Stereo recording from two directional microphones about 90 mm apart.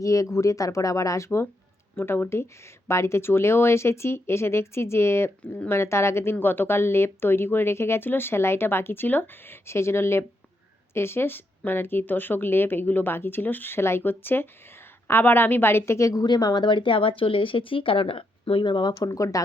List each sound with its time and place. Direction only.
0.0 s speech: 35° left (ahead or behind)
16.2 s speech: 50° left (ahead or behind)
19.0 s speech: 40° left (ahead or behind)